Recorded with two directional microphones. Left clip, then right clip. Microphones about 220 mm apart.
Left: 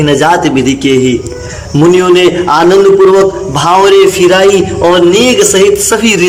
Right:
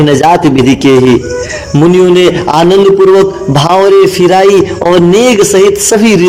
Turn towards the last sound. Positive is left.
turn(degrees=-20)  # may be behind; listen again after turning